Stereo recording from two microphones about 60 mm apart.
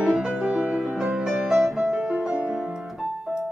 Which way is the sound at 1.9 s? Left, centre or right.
Centre.